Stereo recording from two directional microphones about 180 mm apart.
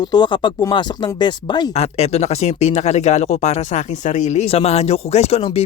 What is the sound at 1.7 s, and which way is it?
Speech, 35° left (ahead or behind).